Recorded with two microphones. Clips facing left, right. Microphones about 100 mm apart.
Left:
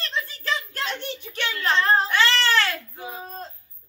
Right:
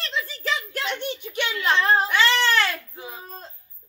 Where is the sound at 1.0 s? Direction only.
15° right (ahead or behind).